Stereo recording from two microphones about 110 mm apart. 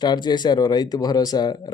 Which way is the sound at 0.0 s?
40° left (ahead or behind).